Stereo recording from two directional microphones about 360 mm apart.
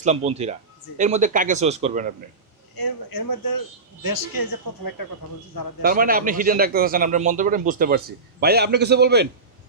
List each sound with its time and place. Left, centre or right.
0.0 s a man's voice: centre
2.8 s speech: left
5.8 s a man's voice: right